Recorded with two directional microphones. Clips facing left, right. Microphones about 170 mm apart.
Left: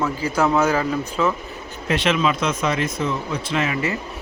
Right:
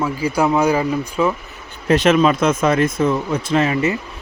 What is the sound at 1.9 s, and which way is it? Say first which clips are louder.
Speech: right 7 dB; 45° right (ahead or behind).